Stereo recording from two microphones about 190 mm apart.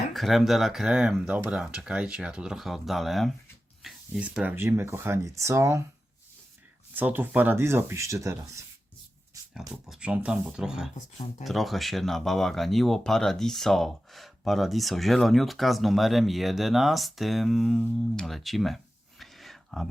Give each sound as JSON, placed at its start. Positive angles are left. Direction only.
{"t": 0.1, "sound": "speech", "side_deg": 0}
{"t": 6.9, "sound": "speech", "side_deg": -10}
{"t": 9.6, "sound": "speech", "side_deg": 0}
{"t": 19.2, "sound": "a sound", "side_deg": 0}